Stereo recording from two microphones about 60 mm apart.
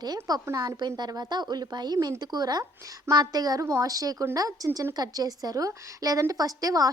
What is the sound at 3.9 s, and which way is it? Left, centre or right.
Speech, right.